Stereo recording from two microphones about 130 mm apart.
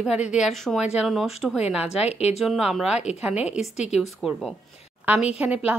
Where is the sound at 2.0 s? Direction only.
55° left (ahead or behind).